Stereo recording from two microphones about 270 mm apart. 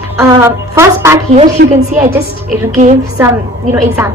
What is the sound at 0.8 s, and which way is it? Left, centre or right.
Speech, centre.